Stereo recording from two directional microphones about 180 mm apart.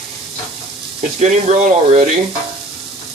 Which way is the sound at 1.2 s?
45° right (ahead or behind).